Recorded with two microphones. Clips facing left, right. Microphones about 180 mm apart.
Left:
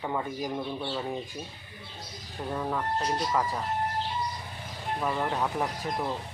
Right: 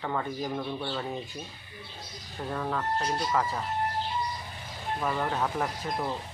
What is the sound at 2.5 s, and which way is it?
Speech, 10° left (ahead or behind).